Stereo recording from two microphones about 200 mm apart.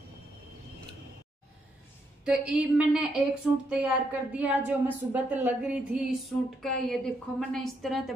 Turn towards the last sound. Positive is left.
turn(degrees=0)  # may be behind; listen again after turning